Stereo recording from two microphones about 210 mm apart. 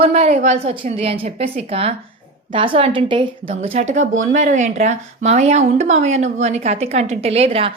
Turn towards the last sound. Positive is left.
turn(degrees=-30)  # may be behind; listen again after turning